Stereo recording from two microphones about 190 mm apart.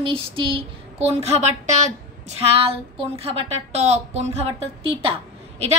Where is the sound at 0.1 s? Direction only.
30° right (ahead or behind).